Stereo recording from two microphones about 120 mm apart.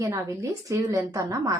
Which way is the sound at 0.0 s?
25° right (ahead or behind).